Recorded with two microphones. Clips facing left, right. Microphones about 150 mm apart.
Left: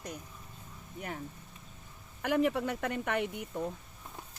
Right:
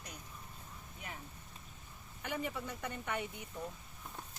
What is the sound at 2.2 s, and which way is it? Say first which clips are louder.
Speech: left 11 dB; 75° left (ahead or behind).